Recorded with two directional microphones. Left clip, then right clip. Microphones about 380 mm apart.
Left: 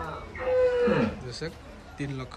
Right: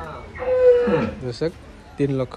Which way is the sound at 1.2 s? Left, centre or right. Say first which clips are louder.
Right 11 dB; centre.